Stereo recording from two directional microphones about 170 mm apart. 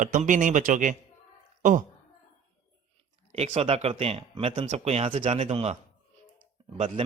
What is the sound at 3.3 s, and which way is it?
Speech, 35° right (ahead or behind).